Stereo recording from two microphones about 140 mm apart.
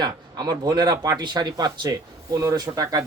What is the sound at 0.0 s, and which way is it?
Speech, 30° right (ahead or behind).